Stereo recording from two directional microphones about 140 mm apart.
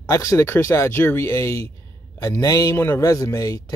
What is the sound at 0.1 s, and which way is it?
A man's voice, 20° left (ahead or behind).